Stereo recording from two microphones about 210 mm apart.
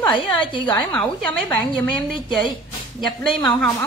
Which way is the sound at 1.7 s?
20° left (ahead or behind).